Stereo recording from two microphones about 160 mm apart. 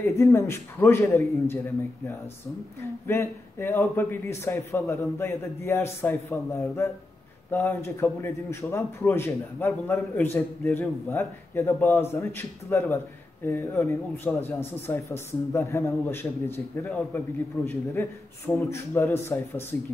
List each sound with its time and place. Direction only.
0.0 s a man's voice: 20° left (ahead or behind)
3.1 s a man's voice: 15° left (ahead or behind)
17.6 s a man's voice: centre (ahead or behind)
18.0 s a man's voice: 15° left (ahead or behind)